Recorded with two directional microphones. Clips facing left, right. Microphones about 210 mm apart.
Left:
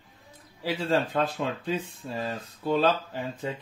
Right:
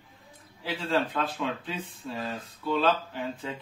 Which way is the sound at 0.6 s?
40° left (ahead or behind).